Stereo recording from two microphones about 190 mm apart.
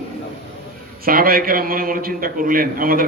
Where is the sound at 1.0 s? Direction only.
50° right (ahead or behind).